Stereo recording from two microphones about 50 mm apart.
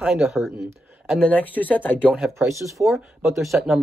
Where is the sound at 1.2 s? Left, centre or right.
Left.